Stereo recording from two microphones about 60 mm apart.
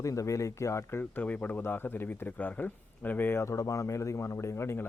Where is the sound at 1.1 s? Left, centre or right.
Left.